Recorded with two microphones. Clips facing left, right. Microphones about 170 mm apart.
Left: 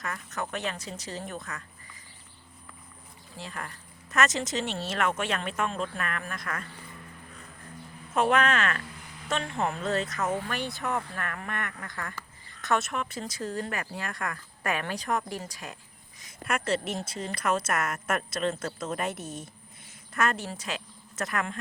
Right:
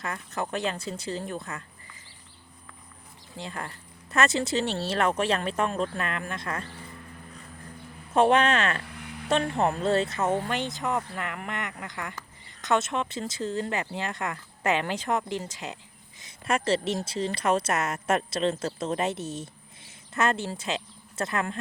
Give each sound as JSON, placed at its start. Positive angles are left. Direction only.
{"t": 0.0, "sound": "speech", "side_deg": -30}
{"t": 3.3, "sound": "speech", "side_deg": -30}
{"t": 8.1, "sound": "a woman's voice", "side_deg": -30}